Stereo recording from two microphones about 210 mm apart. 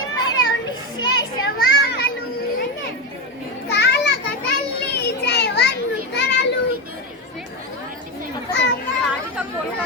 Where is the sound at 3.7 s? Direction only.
55° left (ahead or behind).